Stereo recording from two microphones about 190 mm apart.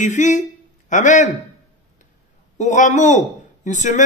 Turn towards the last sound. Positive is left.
turn(degrees=40)  # may be behind; listen again after turning